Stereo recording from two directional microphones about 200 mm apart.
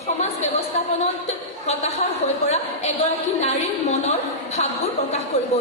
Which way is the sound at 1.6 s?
35° left (ahead or behind).